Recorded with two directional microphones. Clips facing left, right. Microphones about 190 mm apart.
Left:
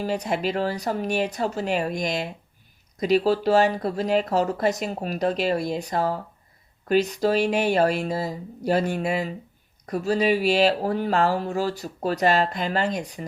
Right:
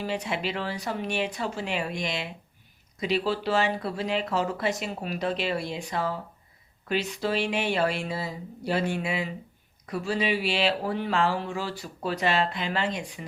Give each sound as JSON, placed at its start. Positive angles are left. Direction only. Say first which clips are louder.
{"t": 0.0, "sound": "speech", "louder": "left 5 dB", "side_deg": 40}